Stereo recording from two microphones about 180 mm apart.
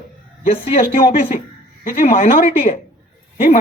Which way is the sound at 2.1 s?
35° left (ahead or behind).